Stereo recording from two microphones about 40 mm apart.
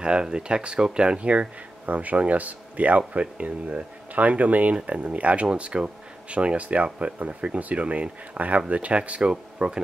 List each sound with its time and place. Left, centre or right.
0.0 s speech: right